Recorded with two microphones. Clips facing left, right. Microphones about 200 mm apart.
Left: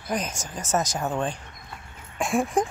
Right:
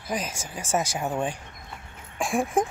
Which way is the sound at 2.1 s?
Centre (ahead or behind).